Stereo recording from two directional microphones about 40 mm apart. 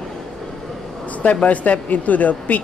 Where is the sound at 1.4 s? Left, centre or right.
Left.